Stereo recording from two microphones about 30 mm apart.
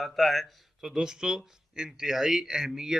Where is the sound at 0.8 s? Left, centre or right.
Right.